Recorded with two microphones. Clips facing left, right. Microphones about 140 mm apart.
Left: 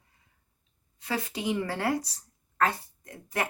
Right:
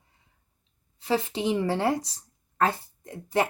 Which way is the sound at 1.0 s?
25° right (ahead or behind).